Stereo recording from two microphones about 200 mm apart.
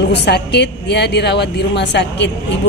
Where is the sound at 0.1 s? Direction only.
55° left (ahead or behind).